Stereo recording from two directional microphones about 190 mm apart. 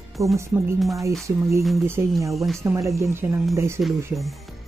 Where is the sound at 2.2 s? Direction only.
15° right (ahead or behind).